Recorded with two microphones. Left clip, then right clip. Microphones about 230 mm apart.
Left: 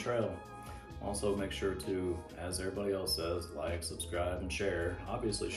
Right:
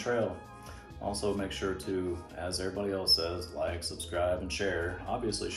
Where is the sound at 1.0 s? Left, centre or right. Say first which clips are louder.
Right 2 dB; centre.